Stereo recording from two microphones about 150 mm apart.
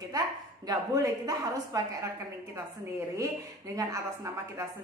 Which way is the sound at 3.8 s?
20° right (ahead or behind).